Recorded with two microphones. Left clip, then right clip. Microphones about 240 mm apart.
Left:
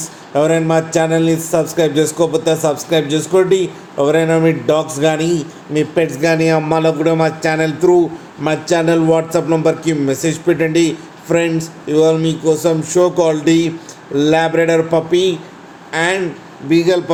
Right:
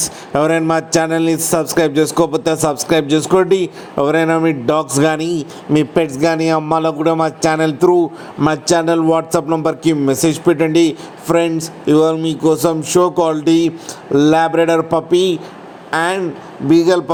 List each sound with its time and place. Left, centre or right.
0.0 s a man's voice: right